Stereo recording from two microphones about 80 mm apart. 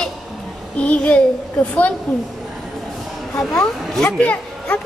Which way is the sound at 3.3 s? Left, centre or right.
Centre.